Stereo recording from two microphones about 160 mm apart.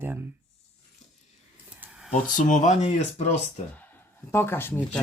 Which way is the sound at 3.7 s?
10° left (ahead or behind).